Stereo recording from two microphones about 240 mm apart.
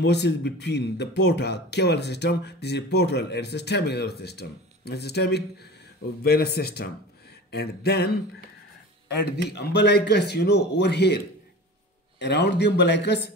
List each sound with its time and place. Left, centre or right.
0.0 s speech: left
9.2 s speech: left
12.2 s speech: left